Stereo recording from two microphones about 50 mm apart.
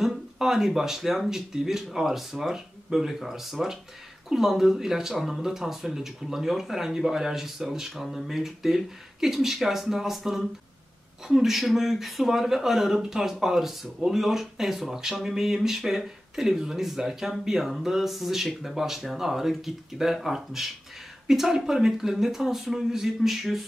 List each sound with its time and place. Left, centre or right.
0.4 s speech: centre